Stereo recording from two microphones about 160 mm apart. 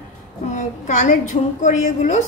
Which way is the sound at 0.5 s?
50° left (ahead or behind).